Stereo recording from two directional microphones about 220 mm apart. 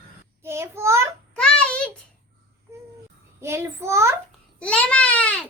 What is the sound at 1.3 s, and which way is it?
Child singing, 5° left (ahead or behind).